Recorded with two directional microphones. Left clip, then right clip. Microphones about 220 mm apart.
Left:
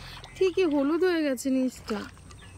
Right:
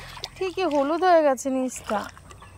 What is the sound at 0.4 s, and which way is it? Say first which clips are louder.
Speech: right 1 dB; 5° left (ahead or behind).